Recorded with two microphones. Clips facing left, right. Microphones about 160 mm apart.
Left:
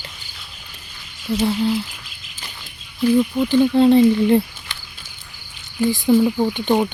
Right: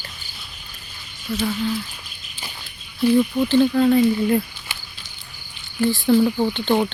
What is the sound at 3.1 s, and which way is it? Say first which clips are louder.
Speech: left 1 dB; 15° left (ahead or behind).